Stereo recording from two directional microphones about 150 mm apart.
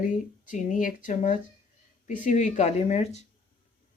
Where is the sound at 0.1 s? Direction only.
60° left (ahead or behind).